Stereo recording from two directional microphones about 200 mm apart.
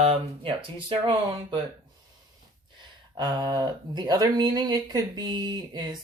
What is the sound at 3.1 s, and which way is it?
Speech, 20° right (ahead or behind).